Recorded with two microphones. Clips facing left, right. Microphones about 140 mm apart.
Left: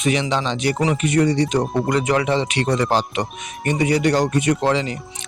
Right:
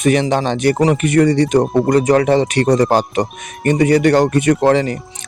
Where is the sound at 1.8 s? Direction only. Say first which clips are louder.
Right 7 dB; 40° right (ahead or behind).